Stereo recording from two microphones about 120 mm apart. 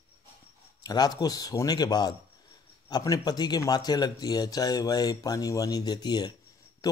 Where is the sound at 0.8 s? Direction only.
35° left (ahead or behind).